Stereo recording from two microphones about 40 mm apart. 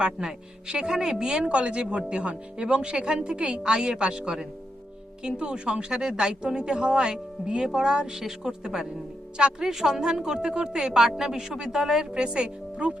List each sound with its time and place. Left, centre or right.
0.0 s a woman's voice: right
10.9 s a woman's voice: centre; by 13.0 s right